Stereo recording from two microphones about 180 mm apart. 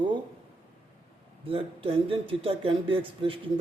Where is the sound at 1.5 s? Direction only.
30° right (ahead or behind).